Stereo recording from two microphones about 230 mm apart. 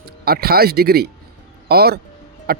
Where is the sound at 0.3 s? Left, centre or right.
Right.